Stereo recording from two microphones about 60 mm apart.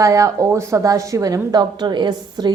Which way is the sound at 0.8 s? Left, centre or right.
Right.